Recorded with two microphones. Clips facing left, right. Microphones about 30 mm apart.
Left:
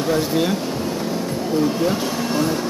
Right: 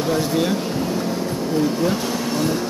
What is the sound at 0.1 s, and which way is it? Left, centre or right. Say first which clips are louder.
Speech: left 1 dB; centre.